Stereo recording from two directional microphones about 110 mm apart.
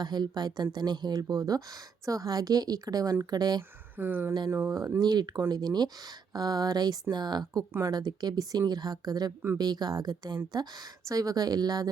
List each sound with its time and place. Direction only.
0.0 s speech: 40° right (ahead or behind)
3.9 s speech: 20° right (ahead or behind)
4.9 s speech: 40° right (ahead or behind)